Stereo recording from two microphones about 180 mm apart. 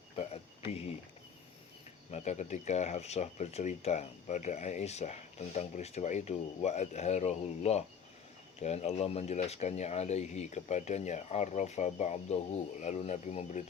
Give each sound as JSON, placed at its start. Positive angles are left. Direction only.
{"t": 0.7, "sound": "speech", "side_deg": 35}
{"t": 2.0, "sound": "speech", "side_deg": 40}